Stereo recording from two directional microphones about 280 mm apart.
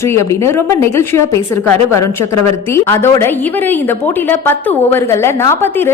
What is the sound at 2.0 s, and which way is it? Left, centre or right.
Speech, left.